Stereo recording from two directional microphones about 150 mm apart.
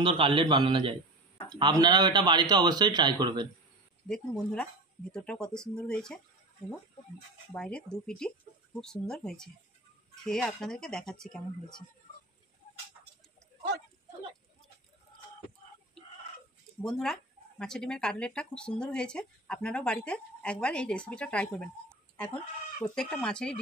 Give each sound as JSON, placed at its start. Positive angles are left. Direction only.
{"t": 0.0, "sound": "a man's voice", "side_deg": -35}
{"t": 4.1, "sound": "speech", "side_deg": 5}
{"t": 7.5, "sound": "speech", "side_deg": 5}
{"t": 12.1, "sound": "a sound", "side_deg": 60}
{"t": 16.8, "sound": "speech", "side_deg": 0}